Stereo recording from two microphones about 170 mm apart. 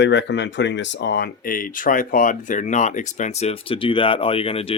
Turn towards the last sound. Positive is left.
turn(degrees=35)  # may be behind; listen again after turning